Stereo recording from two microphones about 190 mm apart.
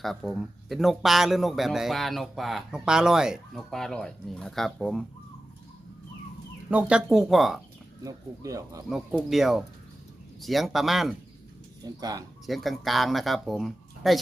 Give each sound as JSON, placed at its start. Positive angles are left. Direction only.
{"t": 0.0, "sound": "speech", "side_deg": 0}
{"t": 6.7, "sound": "speech", "side_deg": -5}
{"t": 8.0, "sound": "speech", "side_deg": -15}
{"t": 8.9, "sound": "speech", "side_deg": 0}
{"t": 11.8, "sound": "speech", "side_deg": -20}
{"t": 12.5, "sound": "speech", "side_deg": 0}